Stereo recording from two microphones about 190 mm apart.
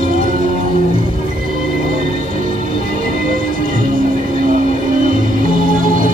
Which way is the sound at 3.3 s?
45° right (ahead or behind).